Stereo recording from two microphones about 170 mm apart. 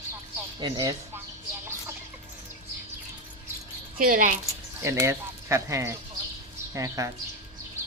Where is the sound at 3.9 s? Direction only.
55° right (ahead or behind).